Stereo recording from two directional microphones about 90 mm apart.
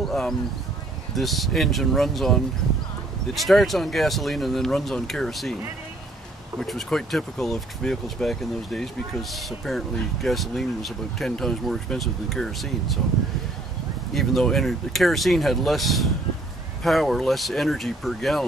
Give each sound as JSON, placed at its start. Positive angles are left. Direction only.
{"t": 0.0, "sound": "speech", "side_deg": 5}
{"t": 3.3, "sound": "speech", "side_deg": 0}
{"t": 6.6, "sound": "speech", "side_deg": 5}
{"t": 14.1, "sound": "speech", "side_deg": 0}